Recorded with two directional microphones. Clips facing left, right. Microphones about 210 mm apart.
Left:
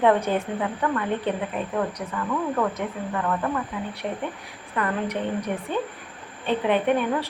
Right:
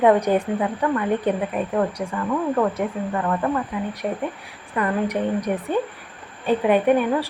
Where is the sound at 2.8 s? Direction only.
45° right (ahead or behind).